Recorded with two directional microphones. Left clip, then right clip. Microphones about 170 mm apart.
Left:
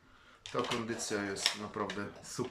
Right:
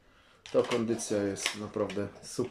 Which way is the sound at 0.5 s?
20° right (ahead or behind).